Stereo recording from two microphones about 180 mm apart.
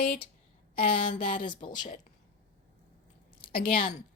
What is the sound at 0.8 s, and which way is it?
Speech, 50° left (ahead or behind).